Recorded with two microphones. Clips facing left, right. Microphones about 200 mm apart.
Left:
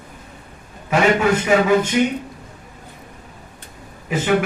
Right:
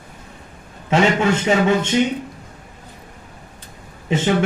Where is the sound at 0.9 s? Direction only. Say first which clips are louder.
Even; 25° right (ahead or behind).